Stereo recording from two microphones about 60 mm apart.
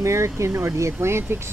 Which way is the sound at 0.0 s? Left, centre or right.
Right.